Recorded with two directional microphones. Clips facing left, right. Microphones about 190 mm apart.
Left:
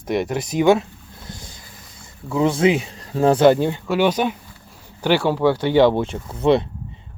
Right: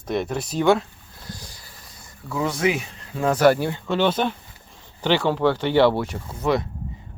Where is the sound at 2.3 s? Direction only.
25° left (ahead or behind).